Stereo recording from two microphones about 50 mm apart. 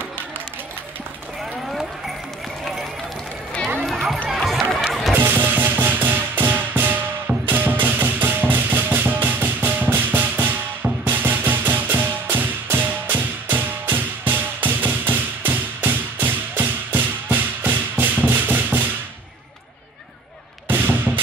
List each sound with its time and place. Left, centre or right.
1.7 s run: centre
3.8 s music: centre
4.3 s run: centre
4.7 s music: centre
5.1 s music: right
20.6 s fireworks: right